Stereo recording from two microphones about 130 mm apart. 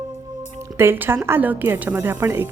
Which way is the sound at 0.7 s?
20° right (ahead or behind).